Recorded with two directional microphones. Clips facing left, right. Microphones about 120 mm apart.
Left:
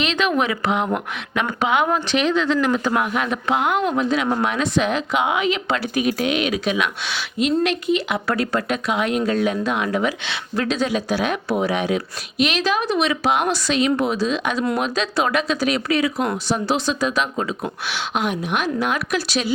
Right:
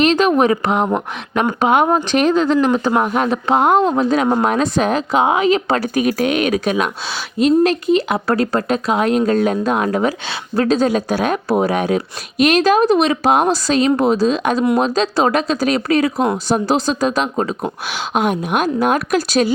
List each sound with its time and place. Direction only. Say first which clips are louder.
0.0 s speech: right 7 dB; 40° right (ahead or behind)
2.6 s speech: right 4 dB; 30° right (ahead or behind); by 19.5 s 45° right (ahead or behind)